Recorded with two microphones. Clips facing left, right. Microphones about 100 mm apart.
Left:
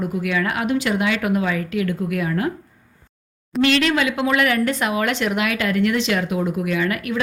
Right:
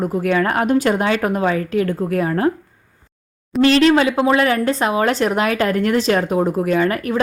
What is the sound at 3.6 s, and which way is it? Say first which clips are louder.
A woman's voice: right 5 dB; 35° right (ahead or behind).